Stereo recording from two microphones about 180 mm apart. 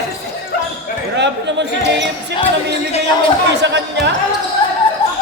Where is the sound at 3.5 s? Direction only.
75° right (ahead or behind).